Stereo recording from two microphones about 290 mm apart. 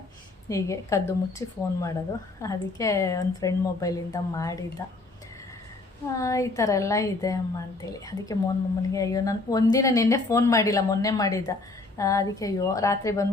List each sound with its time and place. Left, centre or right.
0.4 s speech: centre
6.1 s speech: centre